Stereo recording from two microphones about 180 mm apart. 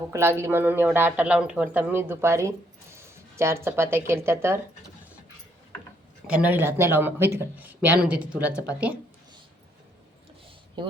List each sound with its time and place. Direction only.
0.1 s speech: 15° right (ahead or behind)
6.2 s speech: 5° right (ahead or behind)
10.8 s speech: 25° right (ahead or behind)